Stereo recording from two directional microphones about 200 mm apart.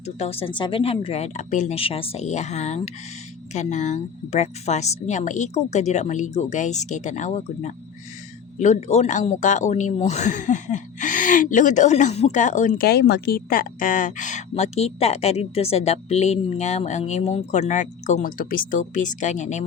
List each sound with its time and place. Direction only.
0.0 s speech: 30° left (ahead or behind)